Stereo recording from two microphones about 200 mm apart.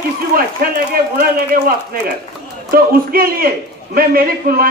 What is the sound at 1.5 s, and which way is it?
Speech, 45° right (ahead or behind).